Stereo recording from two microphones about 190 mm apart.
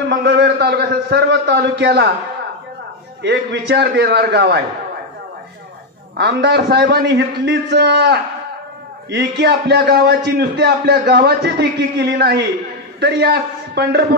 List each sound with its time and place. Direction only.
0.1 s a man's voice: 65° right (ahead or behind)
3.2 s a man's voice: 60° right (ahead or behind)
6.1 s a man's voice: 60° right (ahead or behind)